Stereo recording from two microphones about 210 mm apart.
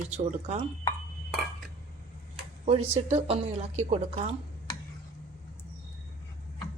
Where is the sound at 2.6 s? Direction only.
30° right (ahead or behind).